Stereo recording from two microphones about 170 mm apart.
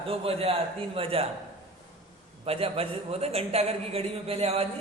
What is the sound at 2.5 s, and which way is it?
A man's voice, 35° right (ahead or behind).